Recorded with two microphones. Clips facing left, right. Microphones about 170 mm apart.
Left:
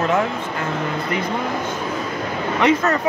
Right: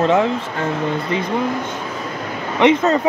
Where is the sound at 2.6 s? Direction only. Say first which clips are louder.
Right 4 dB; 20° right (ahead or behind).